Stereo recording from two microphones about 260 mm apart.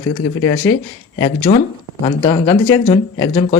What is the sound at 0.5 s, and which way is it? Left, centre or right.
Speech, left.